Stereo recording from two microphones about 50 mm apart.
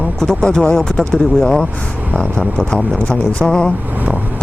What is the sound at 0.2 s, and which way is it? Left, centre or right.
Speech, centre.